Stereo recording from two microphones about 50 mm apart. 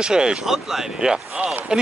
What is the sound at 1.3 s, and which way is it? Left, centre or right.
Speech, right.